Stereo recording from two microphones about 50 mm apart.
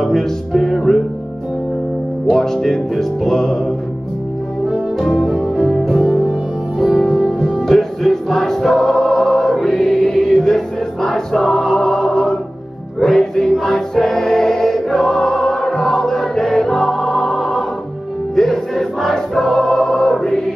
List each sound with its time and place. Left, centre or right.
0.0 s music: centre
2.2 s music: centre
4.6 s music: centre
9.8 s choir: centre
14.3 s music: centre